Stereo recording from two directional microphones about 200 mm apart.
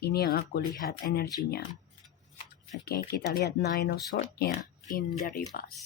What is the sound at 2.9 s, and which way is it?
Speech, 50° left (ahead or behind).